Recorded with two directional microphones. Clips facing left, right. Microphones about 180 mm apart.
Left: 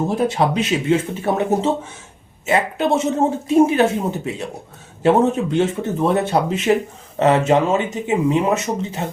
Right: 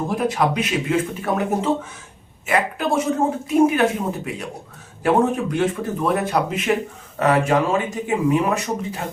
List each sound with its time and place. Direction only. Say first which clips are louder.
0.1 s speech: left 2 dB; 30° left (ahead or behind)